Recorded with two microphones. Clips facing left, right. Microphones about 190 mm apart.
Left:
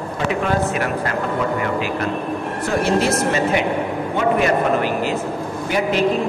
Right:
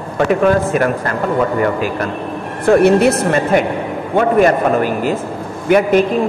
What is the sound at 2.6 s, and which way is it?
Speech, 60° right (ahead or behind).